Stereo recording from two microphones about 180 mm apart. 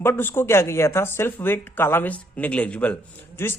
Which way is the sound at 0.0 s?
10° left (ahead or behind).